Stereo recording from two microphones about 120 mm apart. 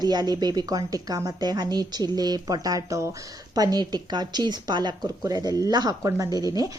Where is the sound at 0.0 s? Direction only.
35° right (ahead or behind).